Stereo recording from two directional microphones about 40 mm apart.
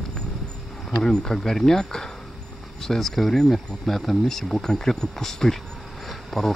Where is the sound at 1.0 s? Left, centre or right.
Centre.